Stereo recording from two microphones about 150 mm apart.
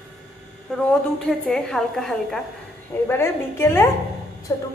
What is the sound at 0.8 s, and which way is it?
A woman's voice, 5° left (ahead or behind).